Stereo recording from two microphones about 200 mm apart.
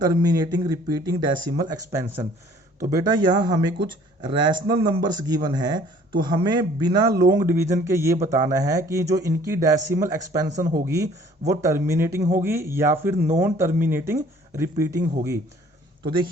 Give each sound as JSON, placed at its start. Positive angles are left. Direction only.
{"t": 0.0, "sound": "speech", "side_deg": -20}
{"t": 10.5, "sound": "speech", "side_deg": -40}
{"t": 10.8, "sound": "speech", "side_deg": -15}
{"t": 13.1, "sound": "speech", "side_deg": -40}
{"t": 13.6, "sound": "speech", "side_deg": -10}